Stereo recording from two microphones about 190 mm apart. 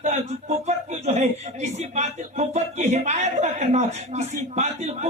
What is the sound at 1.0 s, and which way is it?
Speech, 35° right (ahead or behind).